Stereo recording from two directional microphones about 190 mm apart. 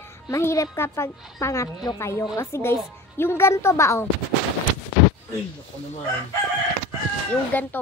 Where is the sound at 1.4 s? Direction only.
15° left (ahead or behind).